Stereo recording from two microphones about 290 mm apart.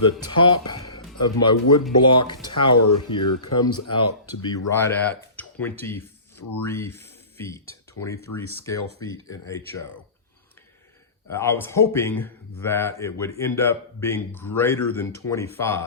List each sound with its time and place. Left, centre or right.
0.0 s a man's voice: centre
2.7 s speech: left
3.6 s a man's voice: centre
11.3 s a man's voice: centre